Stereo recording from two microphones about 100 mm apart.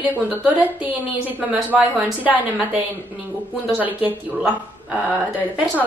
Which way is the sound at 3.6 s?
15° right (ahead or behind).